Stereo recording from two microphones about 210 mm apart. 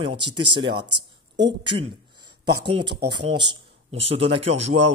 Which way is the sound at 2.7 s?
25° right (ahead or behind).